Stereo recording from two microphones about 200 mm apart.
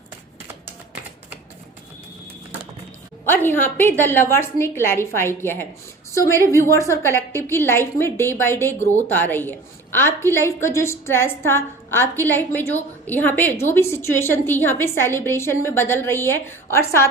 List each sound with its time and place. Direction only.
3.2 s a woman's voice: 10° left (ahead or behind)
6.3 s a woman's voice: 15° right (ahead or behind)
6.6 s a woman's voice: 15° left (ahead or behind)